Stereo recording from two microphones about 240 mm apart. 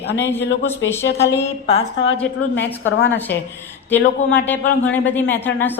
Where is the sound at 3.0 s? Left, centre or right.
Centre.